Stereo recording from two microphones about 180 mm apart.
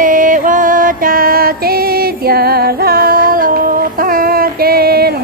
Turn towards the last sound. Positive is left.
turn(degrees=-60)  # may be behind; listen again after turning